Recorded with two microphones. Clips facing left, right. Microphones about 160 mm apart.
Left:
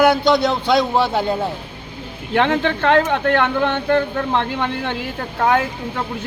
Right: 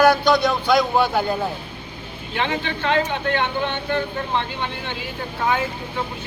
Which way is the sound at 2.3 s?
65° left (ahead or behind).